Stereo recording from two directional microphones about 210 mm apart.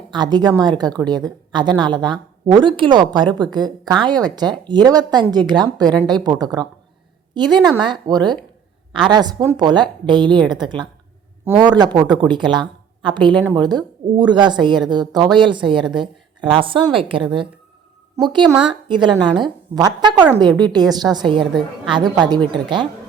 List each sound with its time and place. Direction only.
0.1 s a woman's voice: 20° right (ahead or behind)